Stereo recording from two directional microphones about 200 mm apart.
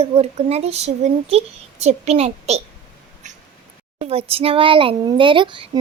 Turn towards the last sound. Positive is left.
turn(degrees=-25)  # may be behind; listen again after turning